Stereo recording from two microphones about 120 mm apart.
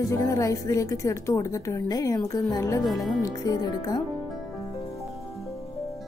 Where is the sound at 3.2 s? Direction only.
30° left (ahead or behind).